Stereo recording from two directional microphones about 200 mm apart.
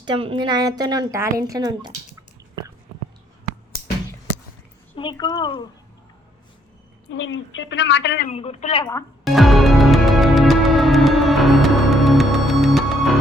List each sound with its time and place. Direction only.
0.0 s a woman's voice: 25° right (ahead or behind)
4.9 s speech: 20° left (ahead or behind)
7.1 s a woman's voice: 70° left (ahead or behind)
8.3 s a woman's voice: 30° left (ahead or behind)
8.8 s speech: 15° left (ahead or behind)
9.2 s music: centre (ahead or behind)